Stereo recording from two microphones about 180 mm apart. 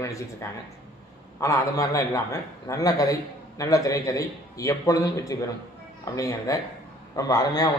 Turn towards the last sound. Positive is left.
turn(degrees=20)  # may be behind; listen again after turning